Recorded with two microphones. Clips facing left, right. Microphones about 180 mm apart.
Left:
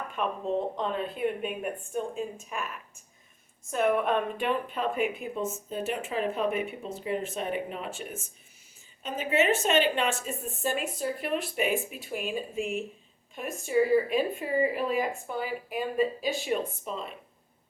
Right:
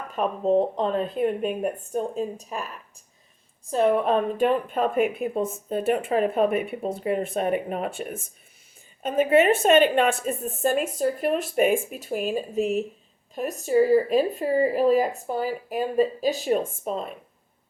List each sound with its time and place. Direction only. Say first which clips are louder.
0.1 s speech: right 9 dB; 40° right (ahead or behind)
3.7 s speech: right 5 dB; 30° right (ahead or behind); by 8.0 s 50° right (ahead or behind)
9.0 s speech: right 7 dB; 55° right (ahead or behind)